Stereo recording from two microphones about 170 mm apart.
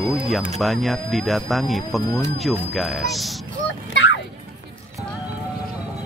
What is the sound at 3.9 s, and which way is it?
Music, 90° left.